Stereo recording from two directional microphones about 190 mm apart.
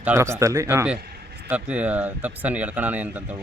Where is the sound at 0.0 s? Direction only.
15° right (ahead or behind).